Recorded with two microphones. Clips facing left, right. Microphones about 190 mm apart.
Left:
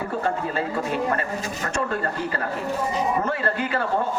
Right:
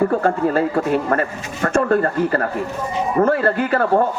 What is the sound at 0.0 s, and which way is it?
A man's voice, 55° right (ahead or behind).